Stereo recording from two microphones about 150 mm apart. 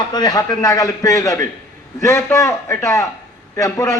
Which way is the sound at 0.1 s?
25° left (ahead or behind).